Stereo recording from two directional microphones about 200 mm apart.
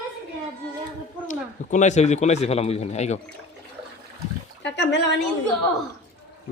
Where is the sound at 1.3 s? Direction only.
40° left (ahead or behind).